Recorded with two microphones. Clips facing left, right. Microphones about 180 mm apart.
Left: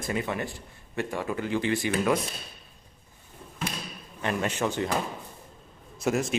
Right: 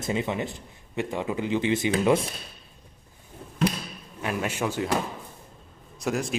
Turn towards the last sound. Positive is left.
turn(degrees=0)  # may be behind; listen again after turning